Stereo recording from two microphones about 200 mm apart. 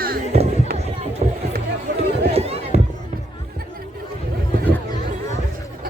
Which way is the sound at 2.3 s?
30° right (ahead or behind).